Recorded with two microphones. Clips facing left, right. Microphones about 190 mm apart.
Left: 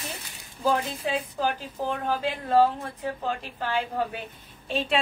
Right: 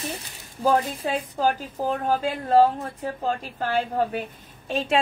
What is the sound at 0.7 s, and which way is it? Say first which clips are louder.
A woman's voice: right 4 dB; 40° right (ahead or behind).